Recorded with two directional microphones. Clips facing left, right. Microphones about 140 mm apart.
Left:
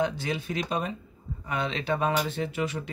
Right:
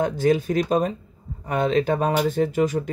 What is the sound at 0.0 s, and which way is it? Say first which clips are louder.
Speech: right 8 dB; 45° right (ahead or behind).